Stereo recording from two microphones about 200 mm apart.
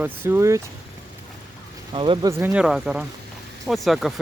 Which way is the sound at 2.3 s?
10° right (ahead or behind).